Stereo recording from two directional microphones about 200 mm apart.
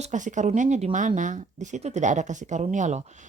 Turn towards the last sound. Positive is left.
turn(degrees=-35)  # may be behind; listen again after turning